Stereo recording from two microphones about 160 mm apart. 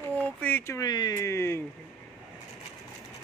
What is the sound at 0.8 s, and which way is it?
Speech, 25° left (ahead or behind).